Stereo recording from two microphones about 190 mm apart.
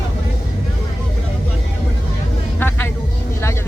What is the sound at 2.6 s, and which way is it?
Vehicle, 10° left (ahead or behind).